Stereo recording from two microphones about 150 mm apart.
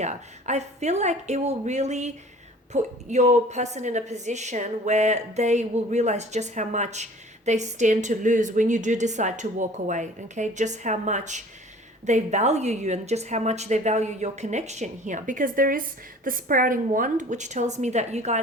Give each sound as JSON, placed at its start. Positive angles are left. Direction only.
{"t": 0.0, "sound": "a woman's voice", "side_deg": -50}